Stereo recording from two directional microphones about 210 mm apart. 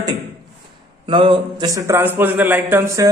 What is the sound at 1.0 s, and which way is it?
A man's voice, 25° right (ahead or behind).